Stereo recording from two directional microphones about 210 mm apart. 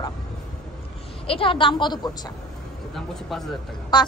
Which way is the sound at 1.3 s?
25° left (ahead or behind).